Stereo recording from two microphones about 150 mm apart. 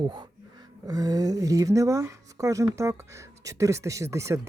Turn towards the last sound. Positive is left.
turn(degrees=-20)  # may be behind; listen again after turning